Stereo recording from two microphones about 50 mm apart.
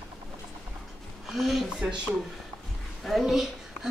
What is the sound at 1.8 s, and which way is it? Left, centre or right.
Speech, right.